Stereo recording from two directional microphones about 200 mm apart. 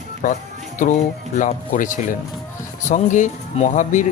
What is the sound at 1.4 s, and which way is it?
Speech, 40° left (ahead or behind).